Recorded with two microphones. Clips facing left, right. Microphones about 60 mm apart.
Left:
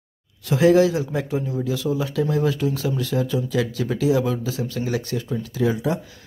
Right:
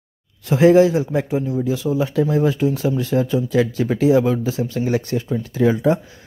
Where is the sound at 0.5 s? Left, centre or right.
Right.